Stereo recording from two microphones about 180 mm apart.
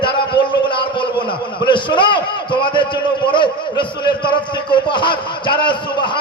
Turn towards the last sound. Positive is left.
turn(degrees=25)  # may be behind; listen again after turning